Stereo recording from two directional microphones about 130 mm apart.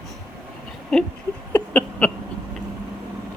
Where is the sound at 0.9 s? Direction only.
5° left (ahead or behind).